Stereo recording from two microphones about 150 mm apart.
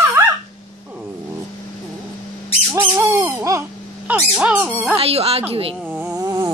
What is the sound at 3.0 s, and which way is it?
Owl, 20° right (ahead or behind).